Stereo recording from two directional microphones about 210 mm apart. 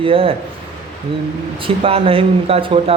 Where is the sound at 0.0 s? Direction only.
25° right (ahead or behind).